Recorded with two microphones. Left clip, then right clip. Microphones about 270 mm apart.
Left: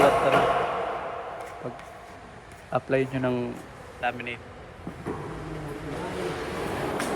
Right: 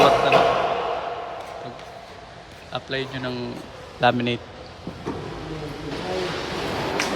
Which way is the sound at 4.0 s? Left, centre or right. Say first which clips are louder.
Right 10 dB; centre.